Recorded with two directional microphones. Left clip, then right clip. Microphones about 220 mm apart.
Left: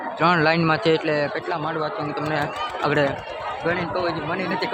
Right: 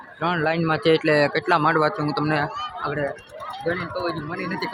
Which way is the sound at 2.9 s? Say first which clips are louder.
Left 7 dB; 45° left (ahead or behind).